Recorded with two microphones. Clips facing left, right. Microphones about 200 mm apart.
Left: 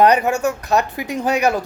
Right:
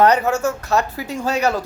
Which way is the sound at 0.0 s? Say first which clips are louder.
Left 1 dB; 15° left (ahead or behind).